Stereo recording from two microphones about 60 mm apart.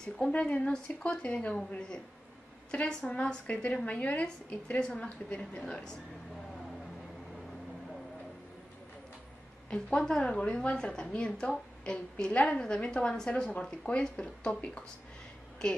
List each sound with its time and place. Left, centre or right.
0.2 s a woman's voice: centre
9.7 s a woman's voice: centre